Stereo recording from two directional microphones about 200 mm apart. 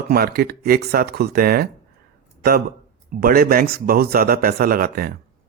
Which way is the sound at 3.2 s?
50° right (ahead or behind).